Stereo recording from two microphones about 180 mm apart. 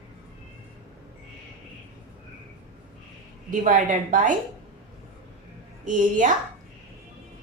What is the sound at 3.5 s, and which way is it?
Speech, 45° right (ahead or behind).